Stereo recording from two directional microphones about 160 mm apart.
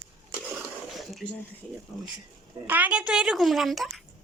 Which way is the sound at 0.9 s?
Centre (ahead or behind).